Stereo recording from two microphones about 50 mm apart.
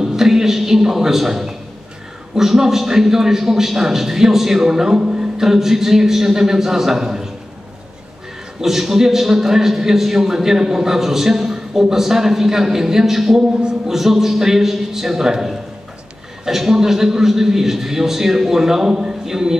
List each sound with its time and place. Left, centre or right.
0.0 s a sound: centre
2.3 s a man's voice: centre
8.5 s a man's voice: centre
13.6 s a man's voice: centre
13.9 s a man's voice: centre